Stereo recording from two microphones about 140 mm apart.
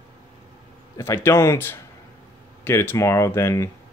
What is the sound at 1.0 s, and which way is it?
Speech, 20° left (ahead or behind).